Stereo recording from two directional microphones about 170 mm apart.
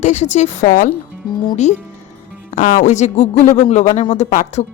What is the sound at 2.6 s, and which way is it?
Speech, 45° left (ahead or behind).